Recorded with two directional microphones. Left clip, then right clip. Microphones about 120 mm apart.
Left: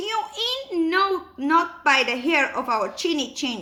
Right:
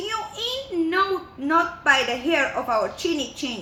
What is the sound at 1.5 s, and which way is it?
A woman's voice, 40° left (ahead or behind).